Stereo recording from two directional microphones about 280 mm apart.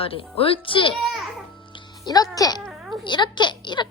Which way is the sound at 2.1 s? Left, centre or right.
Centre.